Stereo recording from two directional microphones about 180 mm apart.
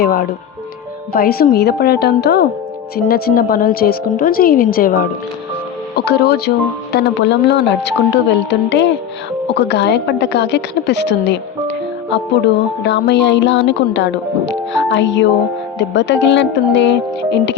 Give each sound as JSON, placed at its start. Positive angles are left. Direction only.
{"t": 0.0, "sound": "a woman's voice", "side_deg": 55}
{"t": 6.0, "sound": "a woman's voice", "side_deg": 60}
{"t": 9.5, "sound": "speech", "side_deg": 70}
{"t": 12.1, "sound": "music", "side_deg": 70}
{"t": 15.8, "sound": "speech", "side_deg": 80}